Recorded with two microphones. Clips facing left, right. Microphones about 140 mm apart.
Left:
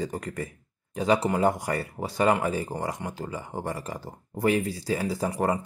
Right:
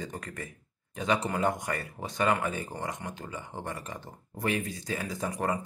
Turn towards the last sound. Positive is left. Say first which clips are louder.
# left 5 dB
turn(degrees=30)  # may be behind; listen again after turning